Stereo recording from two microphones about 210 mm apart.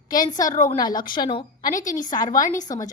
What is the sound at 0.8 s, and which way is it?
A woman's voice, 20° left (ahead or behind).